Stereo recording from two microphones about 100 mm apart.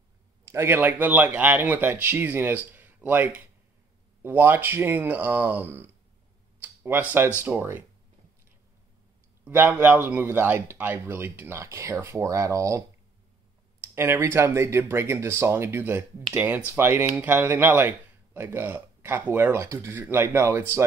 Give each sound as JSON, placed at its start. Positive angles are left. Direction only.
{"t": 0.5, "sound": "speech", "side_deg": -25}
{"t": 9.4, "sound": "speech", "side_deg": -20}